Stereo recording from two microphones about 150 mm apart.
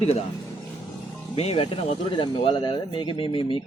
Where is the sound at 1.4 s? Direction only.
40° left (ahead or behind).